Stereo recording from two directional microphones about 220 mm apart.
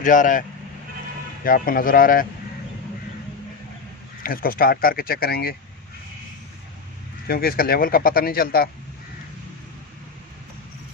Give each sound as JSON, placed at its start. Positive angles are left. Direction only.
{"t": 0.0, "sound": "speech", "side_deg": 35}
{"t": 1.5, "sound": "speech", "side_deg": 40}
{"t": 4.2, "sound": "speech", "side_deg": 40}
{"t": 7.3, "sound": "speech", "side_deg": 45}